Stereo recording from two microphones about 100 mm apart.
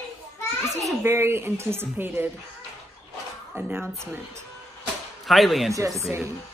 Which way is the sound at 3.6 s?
15° right (ahead or behind).